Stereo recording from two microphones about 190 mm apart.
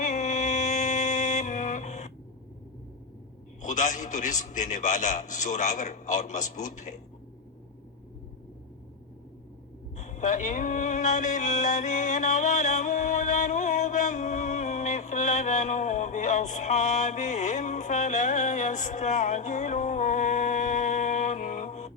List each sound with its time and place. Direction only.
0.0 s music: 40° left (ahead or behind)
3.6 s a man's voice: 40° left (ahead or behind)
10.0 s a sound: 40° left (ahead or behind)